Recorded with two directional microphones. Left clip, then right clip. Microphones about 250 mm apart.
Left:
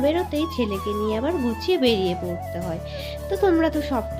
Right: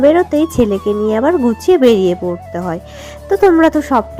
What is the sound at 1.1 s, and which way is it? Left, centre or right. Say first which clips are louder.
Speech: right 13 dB; right.